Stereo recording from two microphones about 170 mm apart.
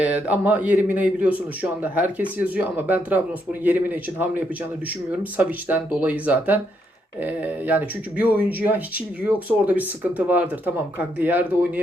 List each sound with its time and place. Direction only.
0.0 s speech: 10° right (ahead or behind)